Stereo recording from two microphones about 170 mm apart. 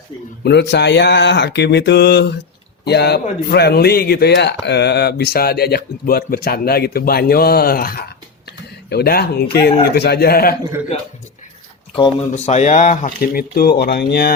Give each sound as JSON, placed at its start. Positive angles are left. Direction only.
{"t": 0.4, "sound": "speech", "side_deg": 80}
{"t": 12.3, "sound": "speech", "side_deg": 40}